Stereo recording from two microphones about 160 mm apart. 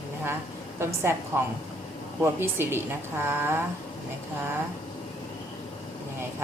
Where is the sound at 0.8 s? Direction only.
15° right (ahead or behind).